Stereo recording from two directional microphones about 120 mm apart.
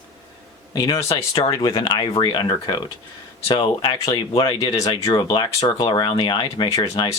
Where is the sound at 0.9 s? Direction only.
25° left (ahead or behind).